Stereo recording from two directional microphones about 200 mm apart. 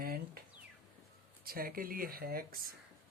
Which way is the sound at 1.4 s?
50° right (ahead or behind).